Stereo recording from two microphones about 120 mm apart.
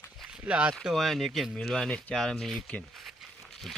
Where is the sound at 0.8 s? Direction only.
Centre (ahead or behind).